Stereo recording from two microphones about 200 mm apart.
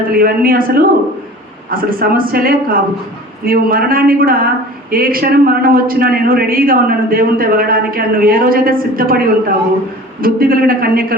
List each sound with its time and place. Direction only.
0.1 s speech: 45° right (ahead or behind)